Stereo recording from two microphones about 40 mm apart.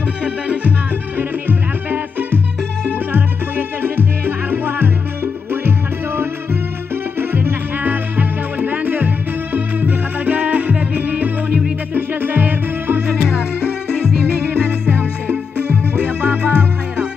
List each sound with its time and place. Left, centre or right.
0.2 s music: right
7.2 s music: right
14.9 s music: right